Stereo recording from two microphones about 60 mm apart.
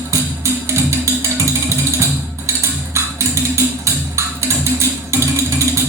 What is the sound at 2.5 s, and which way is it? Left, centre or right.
Music, right.